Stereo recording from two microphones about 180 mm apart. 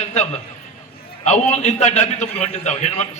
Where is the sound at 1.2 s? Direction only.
40° left (ahead or behind).